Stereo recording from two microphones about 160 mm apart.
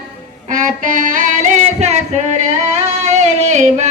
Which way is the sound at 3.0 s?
45° right (ahead or behind).